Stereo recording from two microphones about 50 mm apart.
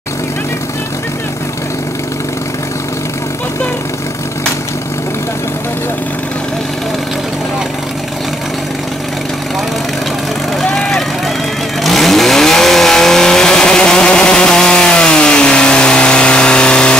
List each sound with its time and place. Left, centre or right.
11.8 s vehicle: centre